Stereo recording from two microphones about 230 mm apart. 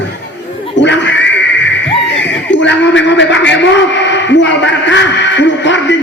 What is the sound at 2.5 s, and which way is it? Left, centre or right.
A man's voice, left.